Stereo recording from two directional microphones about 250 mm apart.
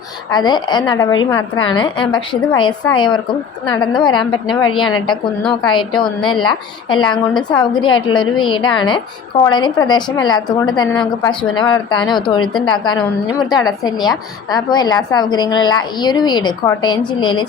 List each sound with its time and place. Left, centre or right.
0.3 s a woman's voice: centre
5.6 s a woman's voice: centre